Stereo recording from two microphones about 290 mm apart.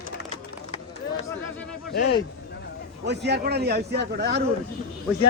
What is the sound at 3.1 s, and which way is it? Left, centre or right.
A man's voice, right.